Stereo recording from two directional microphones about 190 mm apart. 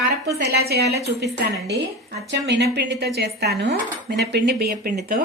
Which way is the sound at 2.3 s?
65° right (ahead or behind).